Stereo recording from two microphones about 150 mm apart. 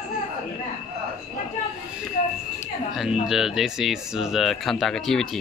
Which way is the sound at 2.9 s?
Centre (ahead or behind).